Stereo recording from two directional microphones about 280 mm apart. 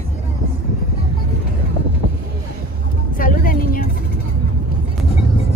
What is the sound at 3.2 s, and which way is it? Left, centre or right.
Vehicle, left.